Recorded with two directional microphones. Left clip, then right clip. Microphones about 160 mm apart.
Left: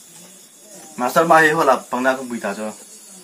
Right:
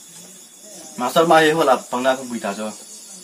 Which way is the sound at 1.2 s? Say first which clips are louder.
Left 1 dB; 20° right (ahead or behind).